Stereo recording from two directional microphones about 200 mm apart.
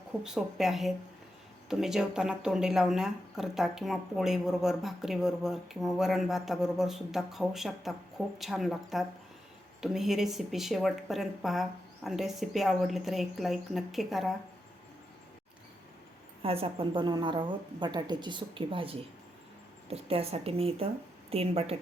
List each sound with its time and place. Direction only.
0.2 s speech: centre (ahead or behind)
16.4 s a woman's voice: 30° right (ahead or behind)